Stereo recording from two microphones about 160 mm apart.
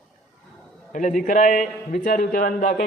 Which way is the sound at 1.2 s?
55° left (ahead or behind).